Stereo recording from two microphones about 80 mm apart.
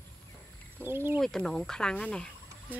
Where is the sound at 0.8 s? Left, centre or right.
Right.